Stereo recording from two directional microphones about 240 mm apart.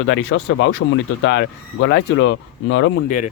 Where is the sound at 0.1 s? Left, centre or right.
Left.